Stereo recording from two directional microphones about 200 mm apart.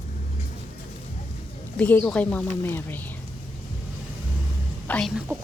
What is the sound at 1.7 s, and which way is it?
Speech, 10° left (ahead or behind).